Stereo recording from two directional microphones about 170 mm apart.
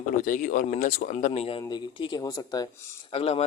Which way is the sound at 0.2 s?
50° left (ahead or behind).